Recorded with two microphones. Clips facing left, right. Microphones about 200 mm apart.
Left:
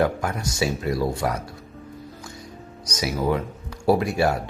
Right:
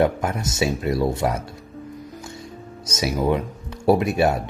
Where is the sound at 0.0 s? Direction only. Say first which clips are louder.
Right 2 dB; 20° right (ahead or behind).